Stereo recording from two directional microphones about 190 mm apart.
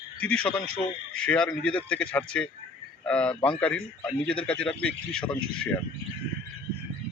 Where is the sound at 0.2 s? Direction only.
5° left (ahead or behind).